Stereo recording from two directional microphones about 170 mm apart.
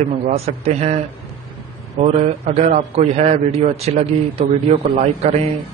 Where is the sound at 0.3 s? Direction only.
40° right (ahead or behind).